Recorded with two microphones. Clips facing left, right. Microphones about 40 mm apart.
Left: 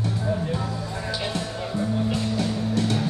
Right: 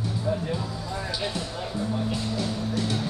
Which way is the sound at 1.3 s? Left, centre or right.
Left.